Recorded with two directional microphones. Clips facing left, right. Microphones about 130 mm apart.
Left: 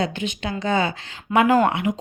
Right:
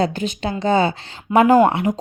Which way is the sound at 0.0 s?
40° right (ahead or behind).